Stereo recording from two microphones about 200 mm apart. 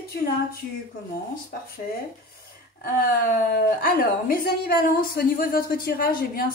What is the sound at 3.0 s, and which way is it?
A woman's voice, 50° left (ahead or behind).